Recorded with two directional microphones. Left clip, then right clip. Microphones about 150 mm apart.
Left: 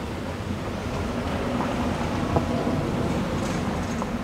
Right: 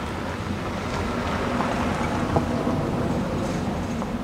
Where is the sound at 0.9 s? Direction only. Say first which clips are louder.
Right 3 dB; 25° right (ahead or behind).